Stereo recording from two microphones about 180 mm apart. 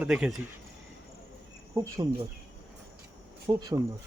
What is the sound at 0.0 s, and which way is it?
Speech, 5° right (ahead or behind).